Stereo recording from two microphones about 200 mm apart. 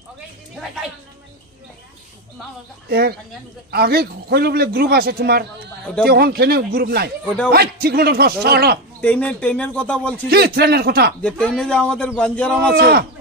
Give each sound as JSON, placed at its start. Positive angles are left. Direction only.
{"t": 2.9, "sound": "a man's voice", "side_deg": -50}
{"t": 9.0, "sound": "speech", "side_deg": 5}
{"t": 10.3, "sound": "a man's voice", "side_deg": -55}
{"t": 11.2, "sound": "a man's voice", "side_deg": 5}
{"t": 12.7, "sound": "a man's voice", "side_deg": -50}